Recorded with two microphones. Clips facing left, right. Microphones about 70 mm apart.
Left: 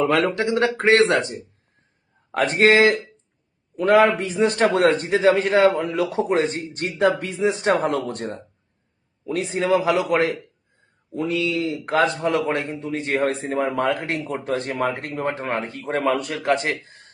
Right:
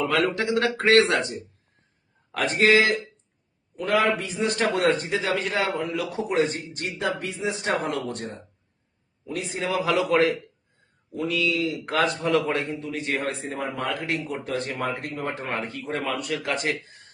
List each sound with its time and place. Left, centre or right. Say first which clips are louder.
0.0 s a man's voice: left 4 dB; left
2.3 s a man's voice: left 3 dB; left
5.7 s a man's voice: left 5 dB; left
6.6 s speech: left 8 dB; left
9.3 s a man's voice: left 6 dB; left
9.7 s a man's voice: left 2 dB; left
11.1 s speech: left 3 dB; left
11.3 s a man's voice: even; left
13.1 s a man's voice: left 7 dB; left
14.7 s speech: left 5 dB; left
15.5 s a man's voice: left 3 dB; left
16.0 s speech: left 8 dB; left
16.5 s a man's voice: left 7 dB; left